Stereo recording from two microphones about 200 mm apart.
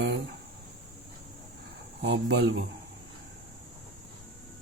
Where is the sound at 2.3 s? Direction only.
55° right (ahead or behind).